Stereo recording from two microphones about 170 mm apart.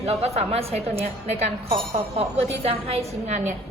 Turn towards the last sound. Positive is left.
turn(degrees=-45)  # may be behind; listen again after turning